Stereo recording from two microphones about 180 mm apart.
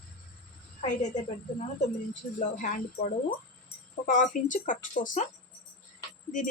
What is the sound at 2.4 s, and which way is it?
Speech, 45° left (ahead or behind).